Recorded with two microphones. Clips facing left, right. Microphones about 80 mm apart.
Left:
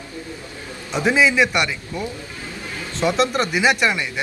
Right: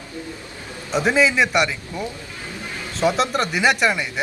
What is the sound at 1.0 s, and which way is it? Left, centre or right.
A man's voice, centre.